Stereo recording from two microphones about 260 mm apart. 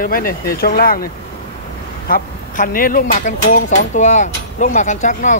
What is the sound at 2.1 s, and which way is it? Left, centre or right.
Speech, left.